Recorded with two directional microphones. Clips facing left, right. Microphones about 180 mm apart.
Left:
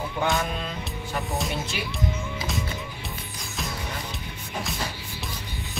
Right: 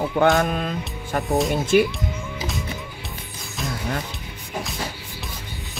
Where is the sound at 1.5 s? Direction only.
50° right (ahead or behind).